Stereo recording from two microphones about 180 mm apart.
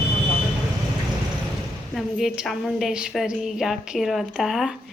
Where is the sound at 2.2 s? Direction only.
Centre (ahead or behind).